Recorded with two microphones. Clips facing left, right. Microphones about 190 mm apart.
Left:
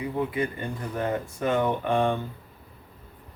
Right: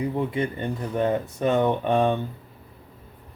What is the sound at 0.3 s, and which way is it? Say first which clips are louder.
Speech: right 2 dB; 25° right (ahead or behind).